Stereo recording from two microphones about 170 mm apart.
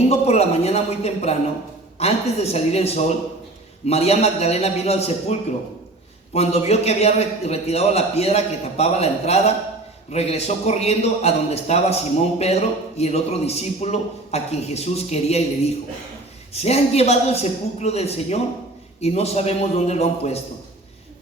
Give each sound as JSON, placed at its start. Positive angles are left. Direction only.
{"t": 0.1, "sound": "a man's voice", "side_deg": 40}
{"t": 16.5, "sound": "a man's voice", "side_deg": 40}